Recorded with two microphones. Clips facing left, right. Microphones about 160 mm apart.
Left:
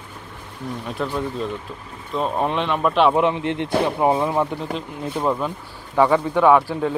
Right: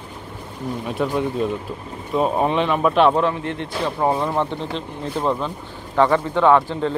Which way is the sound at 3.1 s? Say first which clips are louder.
Left 1 dB; 20° left (ahead or behind).